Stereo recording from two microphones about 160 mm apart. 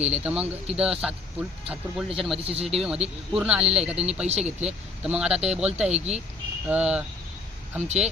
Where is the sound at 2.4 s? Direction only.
35° right (ahead or behind).